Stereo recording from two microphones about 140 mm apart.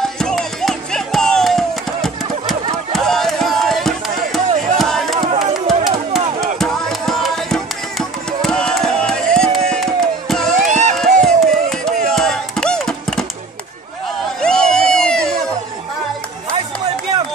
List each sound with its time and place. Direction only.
0.0 s music: 5° left (ahead or behind)
5.3 s music: 50° right (ahead or behind)
6.4 s music: centre (ahead or behind)
10.7 s crowd: 60° right (ahead or behind)
11.2 s music: 5° left (ahead or behind)
14.4 s a sound: 5° left (ahead or behind)